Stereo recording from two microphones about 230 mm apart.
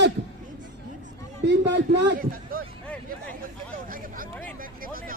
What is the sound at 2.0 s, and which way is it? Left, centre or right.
Speech, right.